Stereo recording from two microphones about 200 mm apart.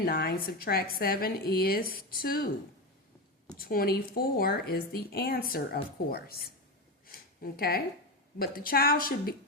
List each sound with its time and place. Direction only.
0.0 s a woman's voice: 50° left (ahead or behind)
3.6 s a woman's voice: 45° left (ahead or behind)